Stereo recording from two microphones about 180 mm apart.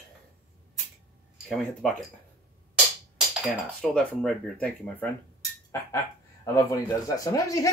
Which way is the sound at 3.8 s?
5° left (ahead or behind).